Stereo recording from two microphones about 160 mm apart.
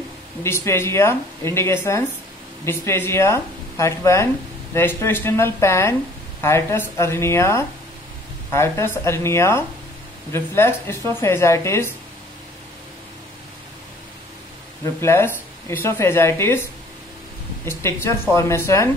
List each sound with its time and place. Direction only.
0.4 s speech: 15° left (ahead or behind)
15.0 s speech: 15° left (ahead or behind)
17.6 s speech: 15° left (ahead or behind)